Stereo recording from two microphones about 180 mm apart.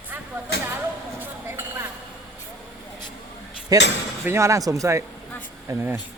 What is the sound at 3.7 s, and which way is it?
Speech, 20° right (ahead or behind).